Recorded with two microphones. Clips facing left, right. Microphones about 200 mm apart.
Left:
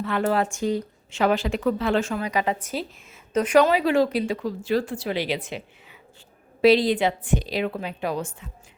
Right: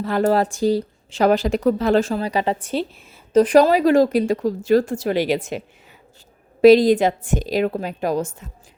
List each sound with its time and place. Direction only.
0.0 s speech: 40° right (ahead or behind)